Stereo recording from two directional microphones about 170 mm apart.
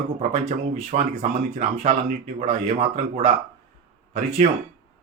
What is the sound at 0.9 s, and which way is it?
Speech, 40° right (ahead or behind).